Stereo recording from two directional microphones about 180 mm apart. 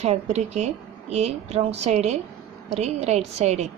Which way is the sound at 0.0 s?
35° right (ahead or behind).